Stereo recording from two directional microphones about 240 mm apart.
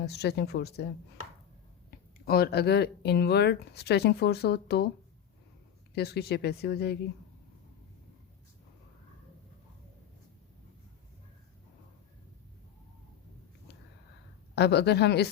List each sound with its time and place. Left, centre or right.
0.0 s speech: left
1.9 s speech: left
5.9 s speech: left
14.5 s speech: left